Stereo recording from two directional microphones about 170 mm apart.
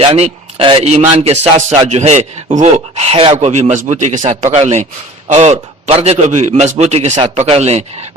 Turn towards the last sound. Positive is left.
turn(degrees=-40)  # may be behind; listen again after turning